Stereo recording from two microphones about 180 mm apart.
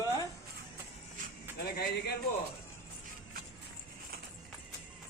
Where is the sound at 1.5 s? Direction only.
60° left (ahead or behind).